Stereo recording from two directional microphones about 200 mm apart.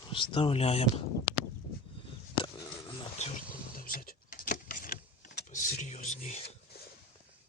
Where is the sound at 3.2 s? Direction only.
35° left (ahead or behind).